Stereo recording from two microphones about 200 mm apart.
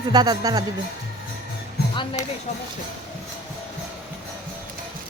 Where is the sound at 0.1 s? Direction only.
20° right (ahead or behind).